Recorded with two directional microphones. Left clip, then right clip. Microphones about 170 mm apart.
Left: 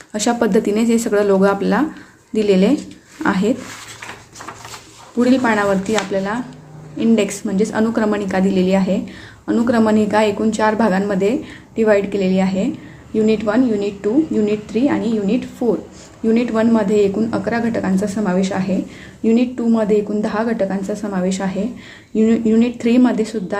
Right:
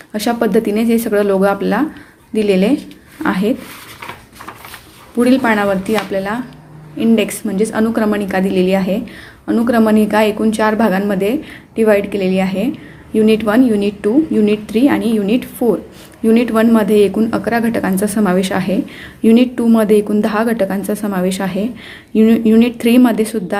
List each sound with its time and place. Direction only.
0.1 s a woman's voice: 5° right (ahead or behind)
5.1 s a woman's voice: 15° right (ahead or behind)